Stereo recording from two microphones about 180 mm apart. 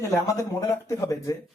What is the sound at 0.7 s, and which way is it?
Speech, 15° left (ahead or behind).